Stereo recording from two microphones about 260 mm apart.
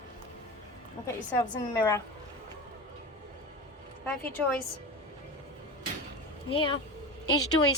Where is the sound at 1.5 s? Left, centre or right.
Centre.